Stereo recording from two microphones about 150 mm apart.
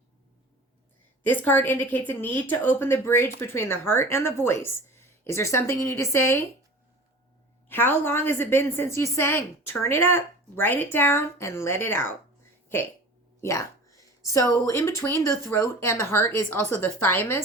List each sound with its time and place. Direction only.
1.2 s a woman's voice: 10° left (ahead or behind)
7.7 s a woman's voice: 15° left (ahead or behind)
13.4 s a sound: 20° left (ahead or behind)
14.5 s a woman's voice: 20° left (ahead or behind)